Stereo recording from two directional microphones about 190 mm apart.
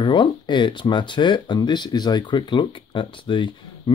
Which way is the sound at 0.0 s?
25° left (ahead or behind).